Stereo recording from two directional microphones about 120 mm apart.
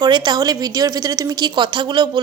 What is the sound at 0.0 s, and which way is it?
A woman's voice, 35° right (ahead or behind).